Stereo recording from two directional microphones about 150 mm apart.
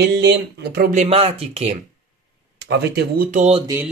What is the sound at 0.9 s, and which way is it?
Speech, 40° right (ahead or behind).